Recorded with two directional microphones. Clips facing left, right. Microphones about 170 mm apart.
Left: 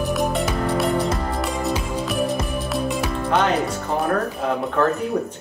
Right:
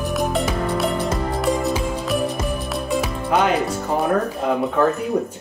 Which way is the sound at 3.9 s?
Centre (ahead or behind).